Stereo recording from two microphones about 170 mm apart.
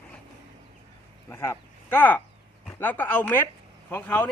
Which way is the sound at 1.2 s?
15° left (ahead or behind).